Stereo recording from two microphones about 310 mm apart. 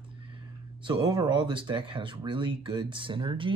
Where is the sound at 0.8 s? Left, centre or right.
Centre.